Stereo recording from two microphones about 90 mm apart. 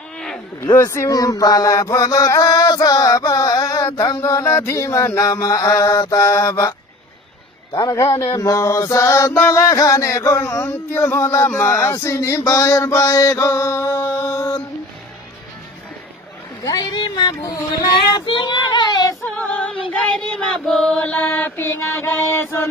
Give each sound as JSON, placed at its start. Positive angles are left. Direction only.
{"t": 0.6, "sound": "speech", "side_deg": 25}
{"t": 4.2, "sound": "mantra", "side_deg": 40}
{"t": 7.7, "sound": "mantra", "side_deg": 35}
{"t": 11.4, "sound": "a sound", "side_deg": 20}
{"t": 11.8, "sound": "male singing", "side_deg": 35}
{"t": 16.6, "sound": "speech", "side_deg": 45}
{"t": 18.1, "sound": "child singing", "side_deg": 60}
{"t": 19.3, "sound": "female singing", "side_deg": 15}
{"t": 20.0, "sound": "mantra", "side_deg": 10}